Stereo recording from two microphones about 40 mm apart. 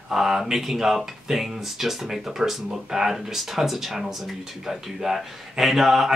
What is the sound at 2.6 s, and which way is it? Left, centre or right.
Speech, centre.